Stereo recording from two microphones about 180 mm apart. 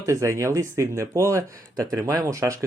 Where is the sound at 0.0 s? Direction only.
15° right (ahead or behind).